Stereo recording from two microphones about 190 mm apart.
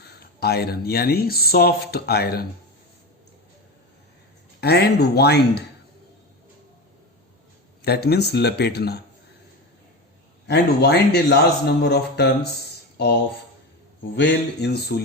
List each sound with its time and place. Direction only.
0.0 s speech: 60° left (ahead or behind)
4.6 s speech: 60° left (ahead or behind)
7.9 s speech: 55° left (ahead or behind)
10.4 s speech: 60° left (ahead or behind)
14.2 s speech: 60° left (ahead or behind)